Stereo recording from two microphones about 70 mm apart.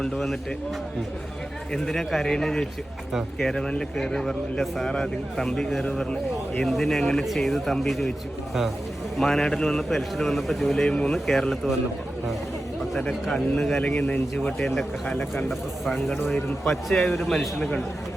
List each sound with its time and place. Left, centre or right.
0.0 s a man's voice: centre
1.7 s a man's voice: centre
9.1 s a man's voice: centre
10.8 s speech: centre
13.3 s a man's voice: centre
13.8 s speech: centre
14.8 s a man's voice: centre